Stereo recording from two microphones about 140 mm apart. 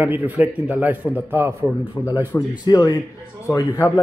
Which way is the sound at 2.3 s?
10° left (ahead or behind).